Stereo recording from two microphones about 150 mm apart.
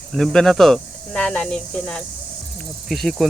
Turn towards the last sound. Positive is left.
turn(degrees=0)  # may be behind; listen again after turning